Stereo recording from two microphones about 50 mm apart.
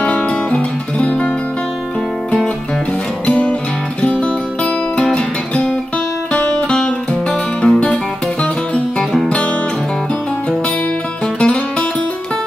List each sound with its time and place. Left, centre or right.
0.0 s music: left
3.3 s music: left
5.1 s guitar: left
6.3 s music: left
11.3 s music: left